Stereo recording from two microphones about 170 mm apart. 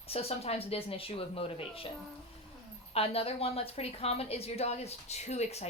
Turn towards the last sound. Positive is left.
turn(degrees=40)  # may be behind; listen again after turning